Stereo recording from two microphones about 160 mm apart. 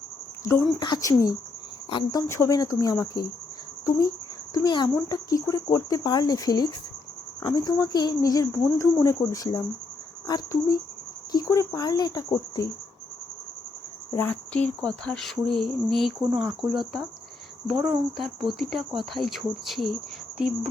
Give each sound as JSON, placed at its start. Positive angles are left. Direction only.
{"t": 0.8, "sound": "speech", "side_deg": 25}
{"t": 2.2, "sound": "speech", "side_deg": 15}
{"t": 14.1, "sound": "cricket", "side_deg": 15}